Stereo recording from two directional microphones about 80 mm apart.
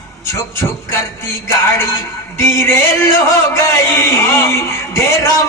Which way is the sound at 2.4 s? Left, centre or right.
Left.